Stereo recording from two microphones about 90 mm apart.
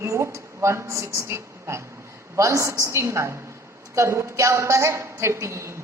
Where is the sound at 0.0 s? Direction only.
35° right (ahead or behind).